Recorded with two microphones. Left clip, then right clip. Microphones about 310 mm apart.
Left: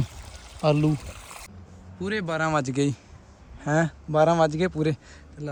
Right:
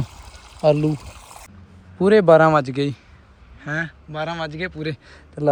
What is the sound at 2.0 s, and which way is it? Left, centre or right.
Speech, centre.